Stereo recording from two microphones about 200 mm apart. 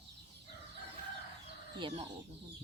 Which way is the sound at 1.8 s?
30° right (ahead or behind).